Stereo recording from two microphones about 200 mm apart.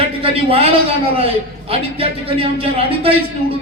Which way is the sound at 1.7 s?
30° right (ahead or behind).